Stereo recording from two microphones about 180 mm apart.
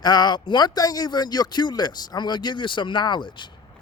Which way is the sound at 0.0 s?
25° left (ahead or behind).